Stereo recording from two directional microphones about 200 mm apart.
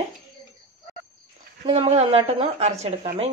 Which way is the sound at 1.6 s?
30° right (ahead or behind).